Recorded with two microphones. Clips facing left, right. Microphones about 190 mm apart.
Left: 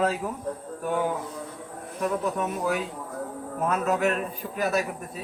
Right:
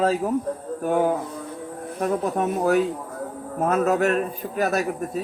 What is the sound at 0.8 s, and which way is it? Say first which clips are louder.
Speech: right 6 dB; 45° right (ahead or behind).